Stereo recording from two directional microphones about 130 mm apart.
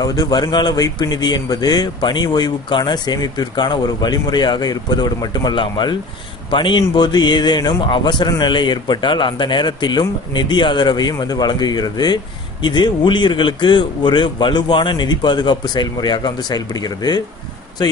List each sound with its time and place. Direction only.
0.0 s a man's voice: 30° left (ahead or behind)